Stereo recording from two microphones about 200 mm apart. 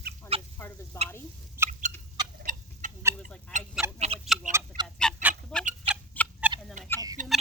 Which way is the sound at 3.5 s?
35° right (ahead or behind).